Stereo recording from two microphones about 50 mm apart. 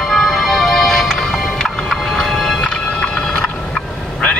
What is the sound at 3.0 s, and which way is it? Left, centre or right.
Vehicle, centre.